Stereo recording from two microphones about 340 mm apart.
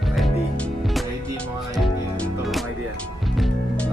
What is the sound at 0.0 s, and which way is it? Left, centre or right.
Music, centre.